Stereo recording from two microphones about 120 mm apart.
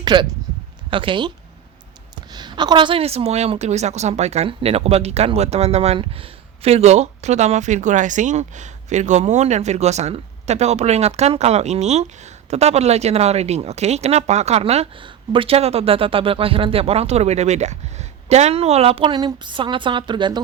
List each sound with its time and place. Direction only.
0.0 s speech: 40° right (ahead or behind)
2.3 s speech: 40° right (ahead or behind); by 14.8 s 60° right (ahead or behind)
15.0 s speech: 45° right (ahead or behind)